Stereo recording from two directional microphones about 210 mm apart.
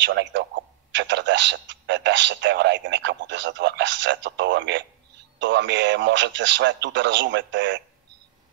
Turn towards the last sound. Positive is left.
turn(degrees=-60)  # may be behind; listen again after turning